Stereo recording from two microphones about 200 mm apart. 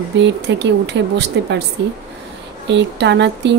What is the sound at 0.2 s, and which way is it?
Speech, 60° right (ahead or behind).